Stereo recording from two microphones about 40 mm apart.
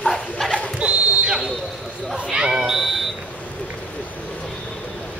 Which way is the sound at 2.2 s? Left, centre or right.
Centre.